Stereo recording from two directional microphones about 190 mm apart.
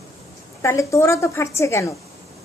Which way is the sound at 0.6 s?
15° left (ahead or behind).